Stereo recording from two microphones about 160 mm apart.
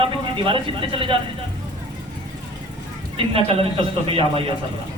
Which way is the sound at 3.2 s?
35° right (ahead or behind).